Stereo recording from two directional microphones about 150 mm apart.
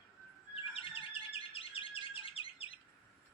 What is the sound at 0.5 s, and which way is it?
Bird vocalization, 40° left (ahead or behind).